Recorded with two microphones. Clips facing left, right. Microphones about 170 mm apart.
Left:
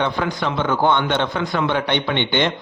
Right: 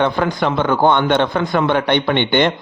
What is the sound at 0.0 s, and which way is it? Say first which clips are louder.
A man's voice: right 5 dB; 50° right (ahead or behind).